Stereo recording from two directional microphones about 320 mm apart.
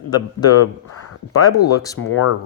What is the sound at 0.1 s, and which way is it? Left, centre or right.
Speech, centre.